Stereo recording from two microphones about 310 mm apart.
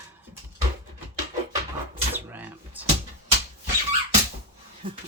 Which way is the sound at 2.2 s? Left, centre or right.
Centre.